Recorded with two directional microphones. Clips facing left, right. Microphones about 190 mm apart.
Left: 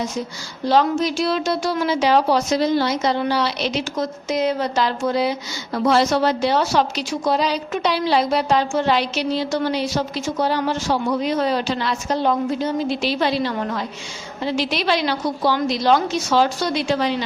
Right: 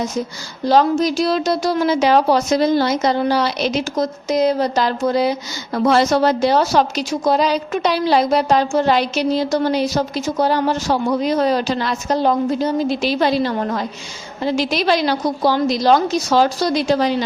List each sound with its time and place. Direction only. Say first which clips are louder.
0.6 s a woman's voice: right 3 dB; 40° right (ahead or behind)